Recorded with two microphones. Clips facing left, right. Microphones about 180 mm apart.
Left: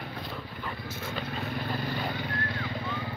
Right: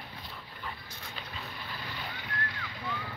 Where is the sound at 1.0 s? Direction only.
55° left (ahead or behind); by 3.1 s 25° left (ahead or behind).